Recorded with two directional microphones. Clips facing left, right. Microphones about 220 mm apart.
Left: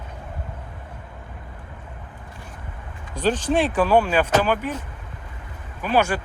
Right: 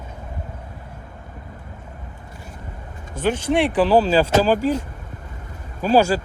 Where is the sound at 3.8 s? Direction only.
30° right (ahead or behind).